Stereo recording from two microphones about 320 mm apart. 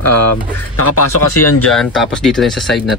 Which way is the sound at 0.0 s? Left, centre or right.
Left.